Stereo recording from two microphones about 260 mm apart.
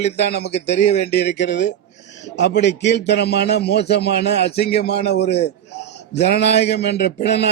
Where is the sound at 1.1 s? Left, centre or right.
Left.